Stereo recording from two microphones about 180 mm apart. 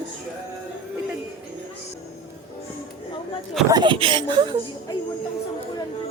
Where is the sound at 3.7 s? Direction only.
25° right (ahead or behind).